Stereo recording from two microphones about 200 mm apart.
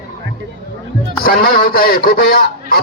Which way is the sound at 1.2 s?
45° left (ahead or behind).